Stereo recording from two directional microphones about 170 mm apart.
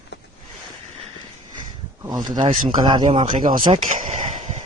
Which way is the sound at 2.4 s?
45° right (ahead or behind).